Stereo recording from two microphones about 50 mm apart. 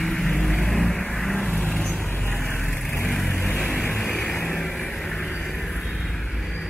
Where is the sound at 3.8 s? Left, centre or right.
Centre.